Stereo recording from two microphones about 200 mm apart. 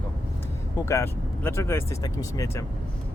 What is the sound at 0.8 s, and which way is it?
Speech, 15° left (ahead or behind).